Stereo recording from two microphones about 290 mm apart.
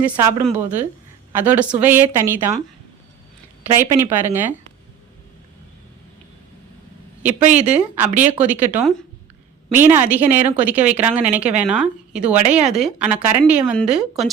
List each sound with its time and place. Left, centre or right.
0.0 s a woman's voice: centre
3.8 s a woman's voice: centre
7.3 s speech: right
7.7 s a woman's voice: centre